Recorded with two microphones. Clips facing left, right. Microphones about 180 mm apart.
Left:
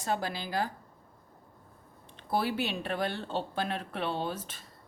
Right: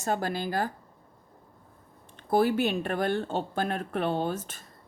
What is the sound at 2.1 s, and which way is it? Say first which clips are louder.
Speech: right 7 dB; 45° right (ahead or behind).